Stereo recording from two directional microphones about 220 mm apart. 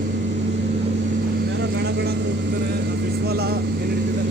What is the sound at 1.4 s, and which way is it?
Vehicle, 50° right (ahead or behind).